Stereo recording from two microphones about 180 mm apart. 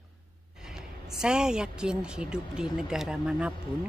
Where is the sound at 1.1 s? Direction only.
5° right (ahead or behind).